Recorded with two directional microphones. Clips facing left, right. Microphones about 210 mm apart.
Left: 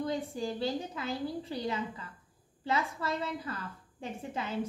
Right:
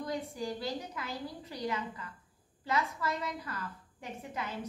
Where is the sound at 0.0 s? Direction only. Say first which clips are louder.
Left 3 dB; 30° left (ahead or behind).